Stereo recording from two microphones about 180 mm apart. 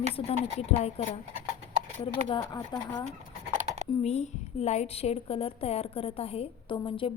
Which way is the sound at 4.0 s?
40° left (ahead or behind).